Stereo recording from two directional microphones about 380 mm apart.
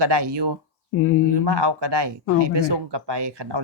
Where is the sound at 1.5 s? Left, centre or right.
Right.